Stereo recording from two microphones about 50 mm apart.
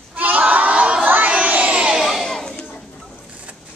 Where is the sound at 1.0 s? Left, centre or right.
Right.